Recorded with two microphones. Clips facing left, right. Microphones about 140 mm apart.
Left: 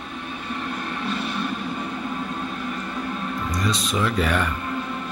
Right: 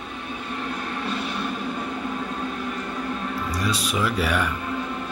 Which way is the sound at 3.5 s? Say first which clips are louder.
Left 1 dB; 10° right (ahead or behind).